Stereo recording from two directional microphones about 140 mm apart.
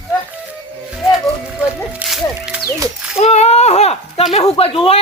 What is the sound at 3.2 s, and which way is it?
Speech, 50° left (ahead or behind).